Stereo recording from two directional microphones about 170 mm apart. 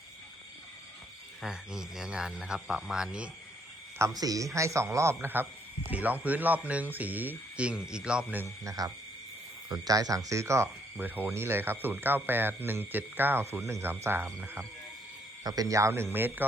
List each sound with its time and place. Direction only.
1.4 s speech: 5° right (ahead or behind)
3.9 s speech: 20° right (ahead or behind)
8.6 s speech: 20° right (ahead or behind)